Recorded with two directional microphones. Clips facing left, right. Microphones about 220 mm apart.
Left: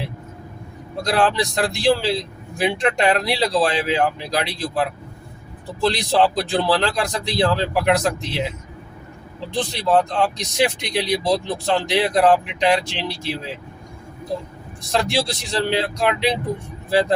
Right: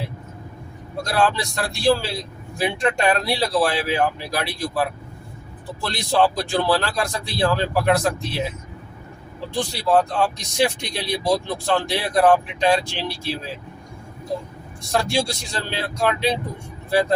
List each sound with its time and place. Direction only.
1.0 s speech: 20° left (ahead or behind)
9.6 s speech: 20° left (ahead or behind)
14.9 s speech: 20° left (ahead or behind)